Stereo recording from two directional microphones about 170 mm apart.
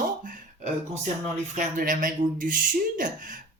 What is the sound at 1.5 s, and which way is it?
Speech, 50° right (ahead or behind).